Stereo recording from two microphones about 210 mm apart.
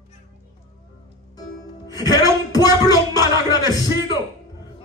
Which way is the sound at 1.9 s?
20° left (ahead or behind).